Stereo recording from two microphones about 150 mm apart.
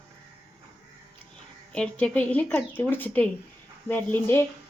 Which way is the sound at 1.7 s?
10° left (ahead or behind).